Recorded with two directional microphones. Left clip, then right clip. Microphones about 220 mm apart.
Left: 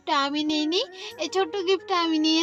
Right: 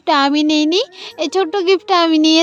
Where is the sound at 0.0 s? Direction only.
40° right (ahead or behind).